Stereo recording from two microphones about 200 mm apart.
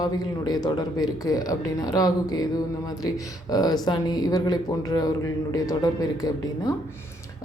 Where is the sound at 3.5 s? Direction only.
20° left (ahead or behind).